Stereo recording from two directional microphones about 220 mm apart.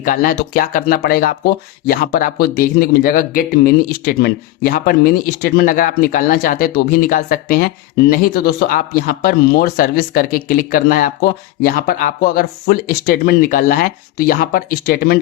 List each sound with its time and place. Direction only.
0.0 s speech: 40° left (ahead or behind)